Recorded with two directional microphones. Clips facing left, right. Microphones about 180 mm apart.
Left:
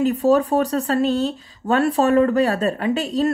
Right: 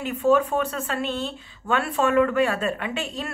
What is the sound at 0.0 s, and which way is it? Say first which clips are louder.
A woman's voice: left 4 dB; 35° left (ahead or behind).